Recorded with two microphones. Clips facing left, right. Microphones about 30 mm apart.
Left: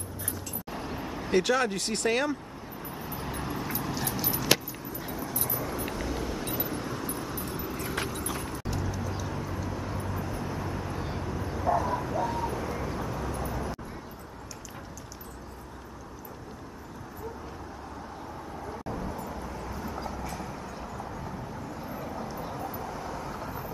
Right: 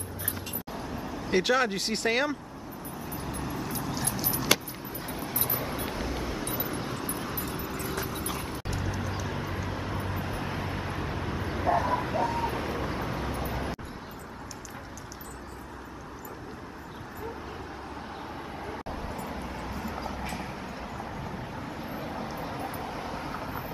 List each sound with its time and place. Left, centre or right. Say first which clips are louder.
0.9 s vehicle: even; centre
1.3 s speech: even; centre
3.1 s vehicle: left 1 dB; centre
3.7 s keys jangling: even; centre
5.1 s vehicle: right 1 dB; right
6.0 s a sound: even; centre
6.8 s vehicle: even; right
9.2 s vehicle: right 1 dB; right
18.9 s vehicle: left 1 dB; right
20.9 s vehicle: right 1 dB; centre
21.4 s vehicle: right 1 dB; right